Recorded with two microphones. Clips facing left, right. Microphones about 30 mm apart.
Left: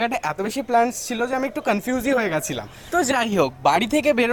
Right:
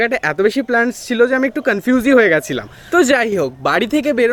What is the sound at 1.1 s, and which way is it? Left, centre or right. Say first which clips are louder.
Speech: right 11 dB; right.